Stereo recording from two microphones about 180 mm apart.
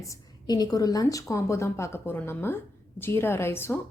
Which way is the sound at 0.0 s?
20° left (ahead or behind).